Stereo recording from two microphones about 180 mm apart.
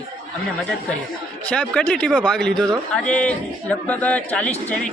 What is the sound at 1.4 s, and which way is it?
Speech, 5° left (ahead or behind).